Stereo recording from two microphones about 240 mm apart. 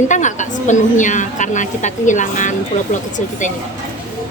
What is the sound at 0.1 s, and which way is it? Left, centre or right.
A woman's voice, left.